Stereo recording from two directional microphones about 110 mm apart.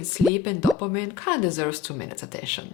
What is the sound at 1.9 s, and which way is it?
Speech, 20° left (ahead or behind).